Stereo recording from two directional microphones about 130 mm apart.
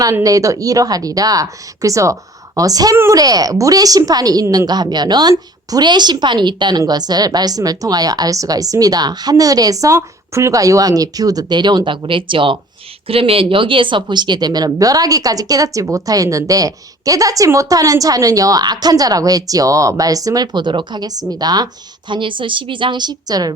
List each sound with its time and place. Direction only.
0.0 s a woman's voice: 25° right (ahead or behind)